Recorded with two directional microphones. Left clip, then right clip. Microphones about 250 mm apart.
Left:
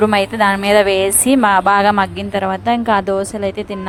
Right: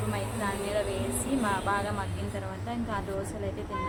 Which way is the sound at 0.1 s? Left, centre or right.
Left.